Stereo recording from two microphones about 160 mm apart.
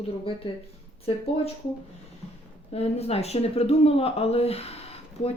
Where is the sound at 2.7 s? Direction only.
40° left (ahead or behind).